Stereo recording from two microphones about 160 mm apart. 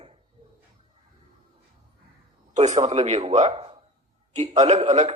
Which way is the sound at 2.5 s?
45° right (ahead or behind).